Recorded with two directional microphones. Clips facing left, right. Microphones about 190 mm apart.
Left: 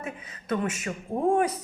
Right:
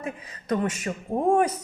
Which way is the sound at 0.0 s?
35° right (ahead or behind).